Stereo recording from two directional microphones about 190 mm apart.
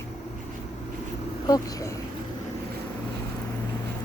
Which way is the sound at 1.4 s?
20° left (ahead or behind).